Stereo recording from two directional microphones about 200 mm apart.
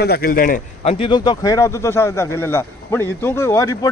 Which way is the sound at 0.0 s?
50° left (ahead or behind).